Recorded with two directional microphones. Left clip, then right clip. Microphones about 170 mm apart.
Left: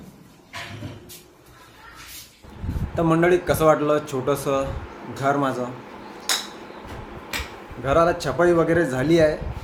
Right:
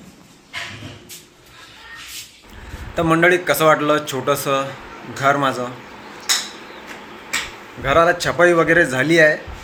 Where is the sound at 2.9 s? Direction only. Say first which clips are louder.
Right 4 dB; centre (ahead or behind).